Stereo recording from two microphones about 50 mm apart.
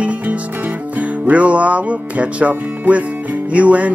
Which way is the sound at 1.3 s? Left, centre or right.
Right.